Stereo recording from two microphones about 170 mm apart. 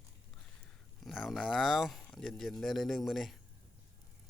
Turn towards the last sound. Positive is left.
turn(degrees=0)  # may be behind; listen again after turning